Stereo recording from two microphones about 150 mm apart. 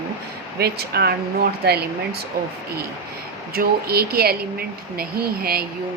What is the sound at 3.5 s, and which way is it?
Speech, 85° right.